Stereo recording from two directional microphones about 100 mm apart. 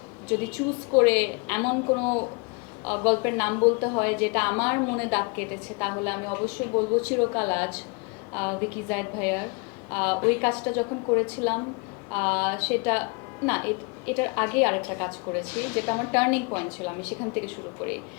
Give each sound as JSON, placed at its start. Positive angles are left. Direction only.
{"t": 0.6, "sound": "a woman's voice", "side_deg": 20}